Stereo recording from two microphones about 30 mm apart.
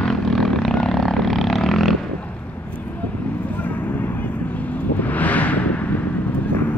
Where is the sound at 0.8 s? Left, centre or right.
Centre.